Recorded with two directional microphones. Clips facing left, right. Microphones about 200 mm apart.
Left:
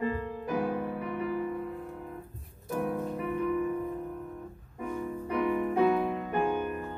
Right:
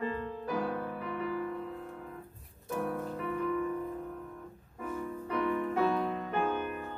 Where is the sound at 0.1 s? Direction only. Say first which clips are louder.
Left 2 dB; 15° left (ahead or behind).